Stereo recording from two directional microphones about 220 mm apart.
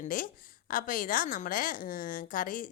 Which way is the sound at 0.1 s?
40° left (ahead or behind).